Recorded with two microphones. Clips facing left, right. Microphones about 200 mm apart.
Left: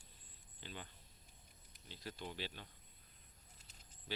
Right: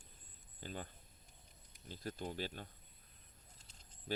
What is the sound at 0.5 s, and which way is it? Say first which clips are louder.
Speech: right 5 dB; 45° right (ahead or behind).